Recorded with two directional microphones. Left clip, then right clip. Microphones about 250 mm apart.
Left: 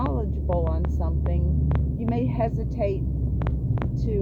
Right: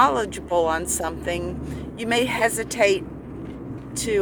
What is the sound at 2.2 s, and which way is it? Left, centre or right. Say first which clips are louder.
Speech: right 7 dB; centre.